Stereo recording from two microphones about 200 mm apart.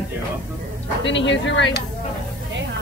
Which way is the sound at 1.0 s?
65° left (ahead or behind).